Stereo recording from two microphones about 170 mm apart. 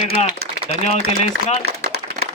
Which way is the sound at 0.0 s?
40° left (ahead or behind).